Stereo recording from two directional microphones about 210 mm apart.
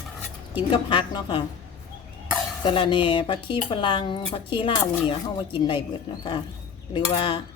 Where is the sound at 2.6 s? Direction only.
25° left (ahead or behind).